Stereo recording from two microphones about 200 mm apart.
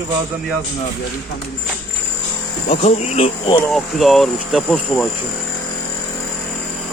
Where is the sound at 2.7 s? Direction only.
30° left (ahead or behind).